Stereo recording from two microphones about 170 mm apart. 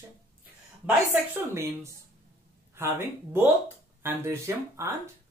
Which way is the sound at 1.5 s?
15° right (ahead or behind).